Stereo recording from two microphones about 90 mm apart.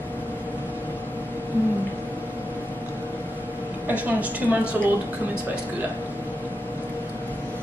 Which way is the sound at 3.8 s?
20° right (ahead or behind).